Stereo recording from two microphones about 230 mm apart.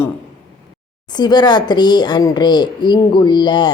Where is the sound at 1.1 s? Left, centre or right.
Centre.